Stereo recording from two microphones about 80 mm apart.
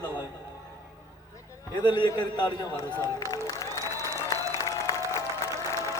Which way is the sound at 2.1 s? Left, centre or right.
Left.